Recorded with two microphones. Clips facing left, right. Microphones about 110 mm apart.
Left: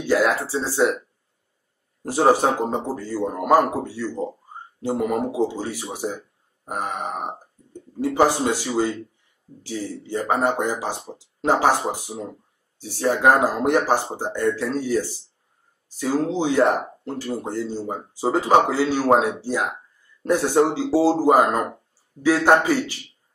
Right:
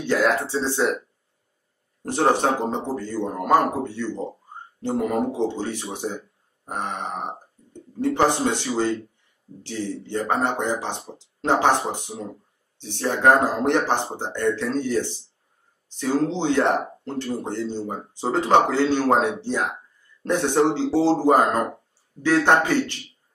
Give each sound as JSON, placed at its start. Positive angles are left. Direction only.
{"t": 0.0, "sound": "speech", "side_deg": 5}
{"t": 2.0, "sound": "speech", "side_deg": 5}